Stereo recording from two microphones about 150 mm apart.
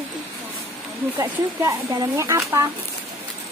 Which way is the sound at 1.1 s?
20° right (ahead or behind).